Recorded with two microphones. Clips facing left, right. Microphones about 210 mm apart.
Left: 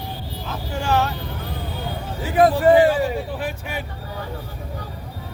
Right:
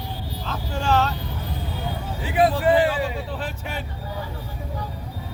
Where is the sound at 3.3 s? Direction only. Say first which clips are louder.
Left 3 dB; 10° left (ahead or behind).